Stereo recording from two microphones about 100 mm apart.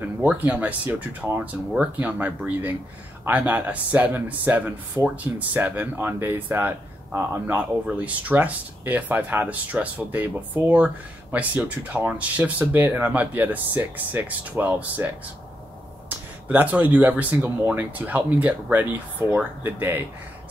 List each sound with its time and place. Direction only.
0.2 s speech: 15° right (ahead or behind)
16.4 s speech: 15° right (ahead or behind)